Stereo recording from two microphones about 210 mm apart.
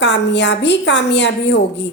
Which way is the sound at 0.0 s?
55° left (ahead or behind).